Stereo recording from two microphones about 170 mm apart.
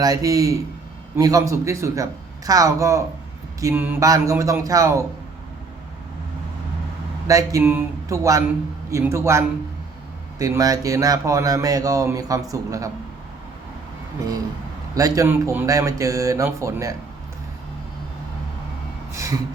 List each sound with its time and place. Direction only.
0.0 s speech: 20° right (ahead or behind)
7.3 s a man's voice: 20° right (ahead or behind)
14.9 s speech: 20° right (ahead or behind)
19.1 s gasp: 15° right (ahead or behind)